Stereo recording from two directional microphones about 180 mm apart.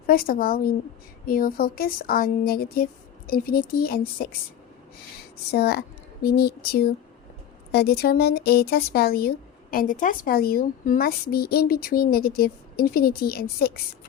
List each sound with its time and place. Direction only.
0.1 s a woman's voice: 55° left (ahead or behind)
5.5 s speech: 60° left (ahead or behind)